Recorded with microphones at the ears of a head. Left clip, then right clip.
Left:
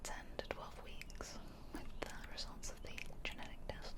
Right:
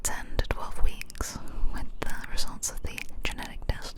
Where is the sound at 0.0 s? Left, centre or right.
Right.